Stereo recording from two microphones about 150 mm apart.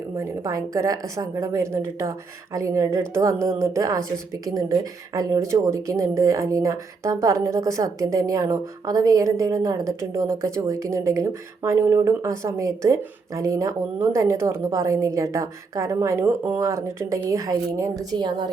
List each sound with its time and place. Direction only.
0.2 s speech: 20° right (ahead or behind)